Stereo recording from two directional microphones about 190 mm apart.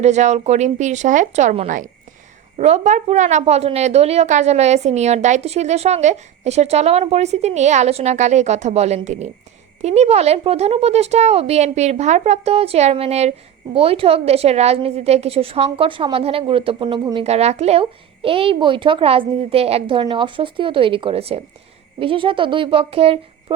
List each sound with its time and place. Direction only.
0.0 s a woman's voice: 35° right (ahead or behind)
17.2 s speech: 35° right (ahead or behind)